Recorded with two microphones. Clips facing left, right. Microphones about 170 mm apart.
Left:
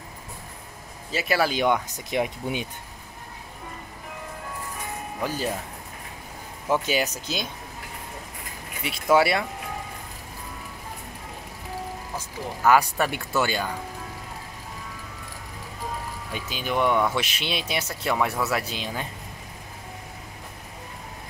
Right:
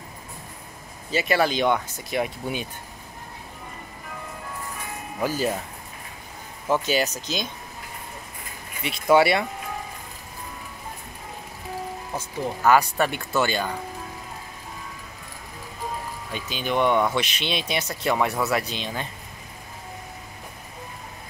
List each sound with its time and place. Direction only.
1.1 s speech: 5° left (ahead or behind); by 2.6 s 20° left (ahead or behind)
5.2 s speech: 5° right (ahead or behind)
6.7 s speech: 10° left (ahead or behind)
8.8 s speech: centre (ahead or behind)
12.6 s speech: 5° left (ahead or behind)
16.3 s speech: 5° left (ahead or behind)